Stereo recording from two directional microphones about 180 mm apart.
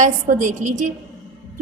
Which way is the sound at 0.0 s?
45° right (ahead or behind).